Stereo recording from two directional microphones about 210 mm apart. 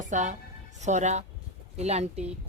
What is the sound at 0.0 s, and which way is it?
A woman's voice, 35° right (ahead or behind).